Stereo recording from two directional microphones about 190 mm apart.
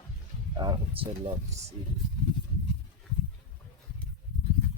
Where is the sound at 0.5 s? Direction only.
25° right (ahead or behind).